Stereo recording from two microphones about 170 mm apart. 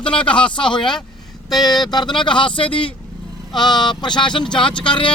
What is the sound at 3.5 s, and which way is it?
Speech, 25° left (ahead or behind).